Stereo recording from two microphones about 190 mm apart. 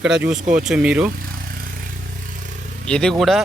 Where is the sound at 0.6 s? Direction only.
5° right (ahead or behind).